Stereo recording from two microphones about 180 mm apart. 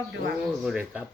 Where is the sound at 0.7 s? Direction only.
5° right (ahead or behind).